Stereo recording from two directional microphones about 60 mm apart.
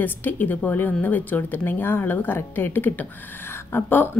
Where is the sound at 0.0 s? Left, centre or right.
Left.